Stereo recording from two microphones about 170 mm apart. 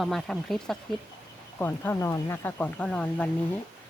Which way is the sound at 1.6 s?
15° left (ahead or behind).